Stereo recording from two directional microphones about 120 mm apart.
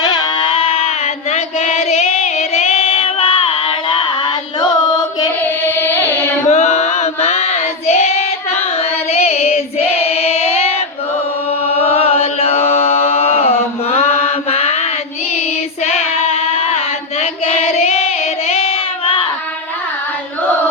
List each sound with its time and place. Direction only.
0.0 s female singing: 35° left (ahead or behind)
4.6 s carnatic music: 35° left (ahead or behind)
5.6 s carnatic music: 20° left (ahead or behind)
6.5 s child singing: 70° left (ahead or behind)
8.5 s female singing: 60° left (ahead or behind)
11.6 s chant: 60° left (ahead or behind)
15.8 s child singing: 60° left (ahead or behind)